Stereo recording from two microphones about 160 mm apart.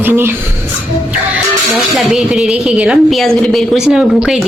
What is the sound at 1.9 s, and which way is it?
Speech, centre (ahead or behind).